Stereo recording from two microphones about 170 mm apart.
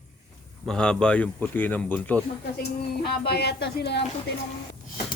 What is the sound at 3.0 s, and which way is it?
Speech, 70° left (ahead or behind).